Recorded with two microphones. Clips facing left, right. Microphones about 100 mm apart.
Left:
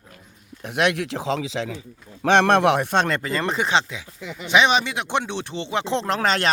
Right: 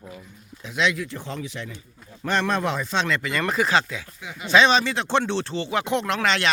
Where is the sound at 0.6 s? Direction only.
60° left (ahead or behind); by 1.8 s 90° left.